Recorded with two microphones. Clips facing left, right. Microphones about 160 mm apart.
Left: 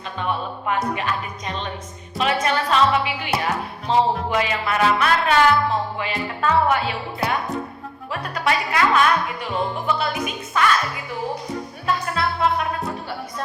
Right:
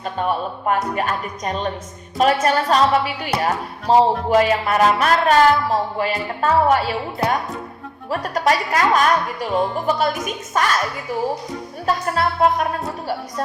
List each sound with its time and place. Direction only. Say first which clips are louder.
0.0 s music: right 4 dB; 45° right (ahead or behind)
2.1 s speech: right 5 dB; 45° right (ahead or behind)
11.9 s music: right 3 dB; 40° right (ahead or behind)